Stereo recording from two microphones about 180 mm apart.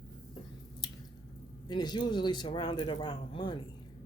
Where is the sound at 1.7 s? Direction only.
25° left (ahead or behind).